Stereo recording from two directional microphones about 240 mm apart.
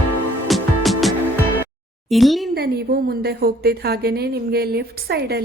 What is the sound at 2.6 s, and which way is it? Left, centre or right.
A woman's voice, right.